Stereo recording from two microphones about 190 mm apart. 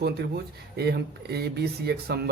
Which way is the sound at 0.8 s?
60° right (ahead or behind).